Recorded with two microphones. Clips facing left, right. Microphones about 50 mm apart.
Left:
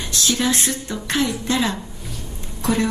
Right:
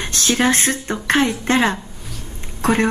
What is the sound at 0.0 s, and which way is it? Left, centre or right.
Speech, right.